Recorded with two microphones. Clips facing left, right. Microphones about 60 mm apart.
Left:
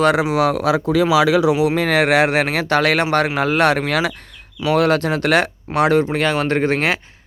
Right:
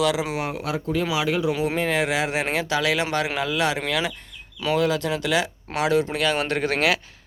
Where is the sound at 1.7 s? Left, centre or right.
Left.